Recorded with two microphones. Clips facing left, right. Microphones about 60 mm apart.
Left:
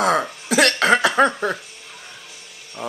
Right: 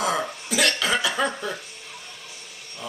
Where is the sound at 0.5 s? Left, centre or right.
Left.